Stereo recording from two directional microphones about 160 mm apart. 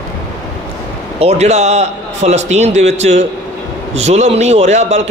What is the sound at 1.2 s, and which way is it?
A man's voice, 45° right (ahead or behind).